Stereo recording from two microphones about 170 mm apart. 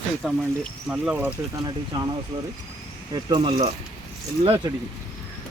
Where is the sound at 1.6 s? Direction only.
25° right (ahead or behind).